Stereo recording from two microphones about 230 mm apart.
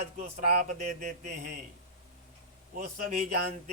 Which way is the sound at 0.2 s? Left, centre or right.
Right.